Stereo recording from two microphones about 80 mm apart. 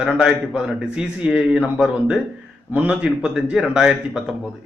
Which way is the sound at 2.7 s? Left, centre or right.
Centre.